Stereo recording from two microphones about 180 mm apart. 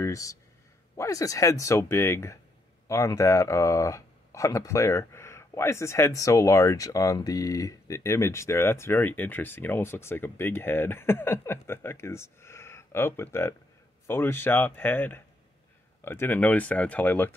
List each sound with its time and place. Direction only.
0.0 s speech: 15° left (ahead or behind)